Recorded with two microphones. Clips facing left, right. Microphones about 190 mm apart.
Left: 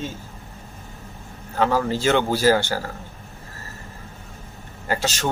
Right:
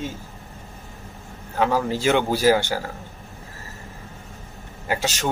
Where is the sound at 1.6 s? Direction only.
10° right (ahead or behind).